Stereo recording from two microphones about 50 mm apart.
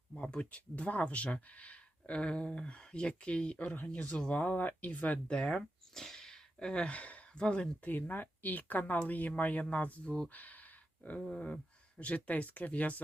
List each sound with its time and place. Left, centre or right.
0.1 s speech: centre
5.4 s speech: centre
7.9 s speech: left
10.2 s a sound: left
11.2 s speech: left